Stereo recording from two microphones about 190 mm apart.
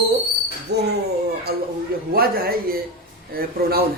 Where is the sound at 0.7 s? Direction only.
60° right (ahead or behind).